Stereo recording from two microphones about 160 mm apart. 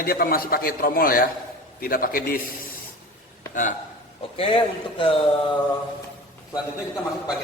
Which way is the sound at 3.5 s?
55° left (ahead or behind).